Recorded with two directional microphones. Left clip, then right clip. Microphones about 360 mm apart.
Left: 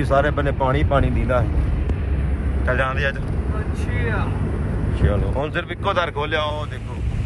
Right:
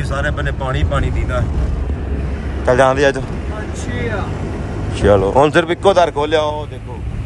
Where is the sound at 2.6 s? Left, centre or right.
Centre.